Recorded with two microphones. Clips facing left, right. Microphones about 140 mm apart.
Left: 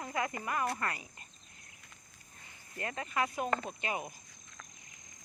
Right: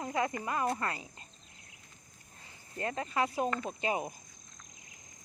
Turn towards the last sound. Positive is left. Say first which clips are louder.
# right 4 dB
turn(degrees=-30)  # may be behind; listen again after turning